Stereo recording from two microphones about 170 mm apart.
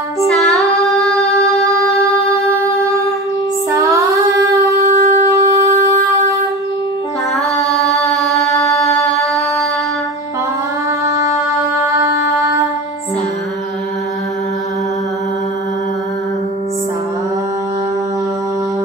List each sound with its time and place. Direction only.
3.9 s child singing: 20° right (ahead or behind)
4.9 s shofar: 50° right (ahead or behind)
5.4 s wind instrument: 20° right (ahead or behind)
7.3 s singing: centre (ahead or behind)
11.8 s music: 20° right (ahead or behind)